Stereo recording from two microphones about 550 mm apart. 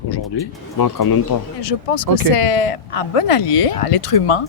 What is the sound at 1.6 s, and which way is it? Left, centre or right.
Speech, left.